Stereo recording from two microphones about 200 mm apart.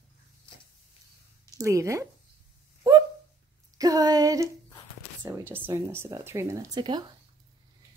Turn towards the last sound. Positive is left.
turn(degrees=-20)  # may be behind; listen again after turning